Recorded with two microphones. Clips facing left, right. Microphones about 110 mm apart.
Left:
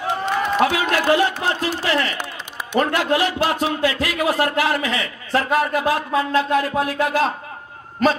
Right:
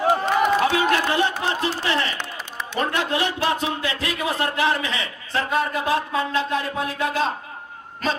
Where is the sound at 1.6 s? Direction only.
25° right (ahead or behind).